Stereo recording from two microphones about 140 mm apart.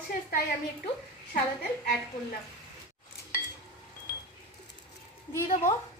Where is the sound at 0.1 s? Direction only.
90° left.